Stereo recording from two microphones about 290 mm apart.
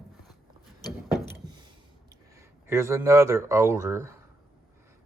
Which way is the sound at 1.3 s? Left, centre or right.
Centre.